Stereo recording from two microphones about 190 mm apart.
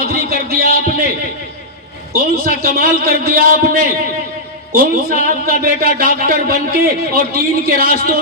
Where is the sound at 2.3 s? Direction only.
50° right (ahead or behind).